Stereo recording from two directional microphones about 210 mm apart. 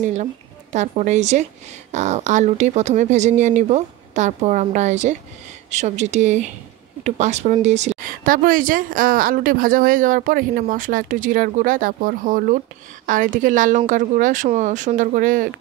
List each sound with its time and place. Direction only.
0.0 s speech: 35° right (ahead or behind)